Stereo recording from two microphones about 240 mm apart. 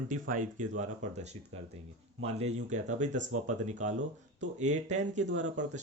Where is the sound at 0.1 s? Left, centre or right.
Right.